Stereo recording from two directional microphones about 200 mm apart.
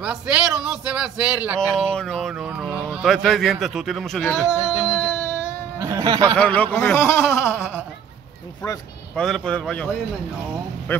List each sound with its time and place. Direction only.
0.0 s speech: 5° right (ahead or behind); by 5.4 s 10° left (ahead or behind)
5.8 s speech: 15° right (ahead or behind)
6.3 s speech: 5° left (ahead or behind)
9.1 s speech: 5° left (ahead or behind)
10.9 s speech: 10° left (ahead or behind)